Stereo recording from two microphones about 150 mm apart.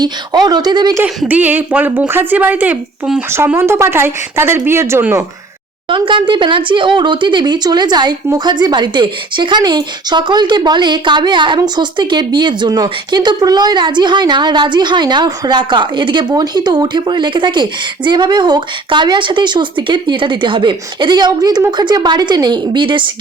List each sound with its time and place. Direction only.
0.0 s speech: 25° right (ahead or behind)
1.0 s a woman's voice: 10° right (ahead or behind)
5.9 s speech: 35° right (ahead or behind)